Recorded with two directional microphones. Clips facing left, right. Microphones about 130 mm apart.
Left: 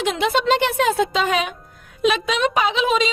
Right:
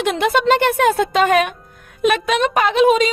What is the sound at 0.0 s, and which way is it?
Speech, 55° right (ahead or behind).